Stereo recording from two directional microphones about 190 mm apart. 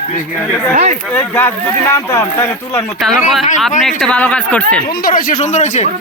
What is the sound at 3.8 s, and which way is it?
Speech, centre (ahead or behind).